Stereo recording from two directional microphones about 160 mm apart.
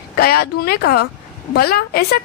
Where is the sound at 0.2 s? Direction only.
75° left (ahead or behind).